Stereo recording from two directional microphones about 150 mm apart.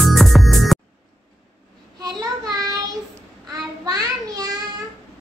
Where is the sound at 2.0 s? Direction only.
25° right (ahead or behind).